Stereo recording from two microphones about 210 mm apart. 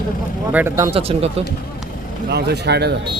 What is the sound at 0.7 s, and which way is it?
Speech, 25° right (ahead or behind).